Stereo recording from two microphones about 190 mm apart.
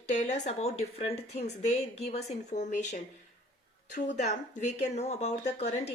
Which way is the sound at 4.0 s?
45° left (ahead or behind).